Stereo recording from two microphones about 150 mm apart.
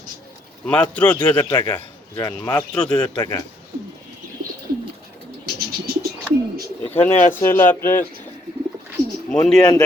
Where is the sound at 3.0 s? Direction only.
25° left (ahead or behind).